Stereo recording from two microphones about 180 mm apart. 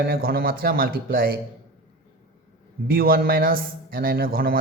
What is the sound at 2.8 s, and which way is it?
A man's voice, 55° right (ahead or behind).